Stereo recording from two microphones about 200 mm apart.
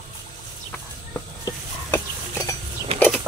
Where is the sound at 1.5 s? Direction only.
15° left (ahead or behind).